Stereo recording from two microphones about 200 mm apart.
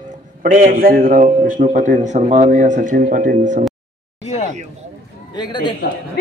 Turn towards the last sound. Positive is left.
turn(degrees=20)  # may be behind; listen again after turning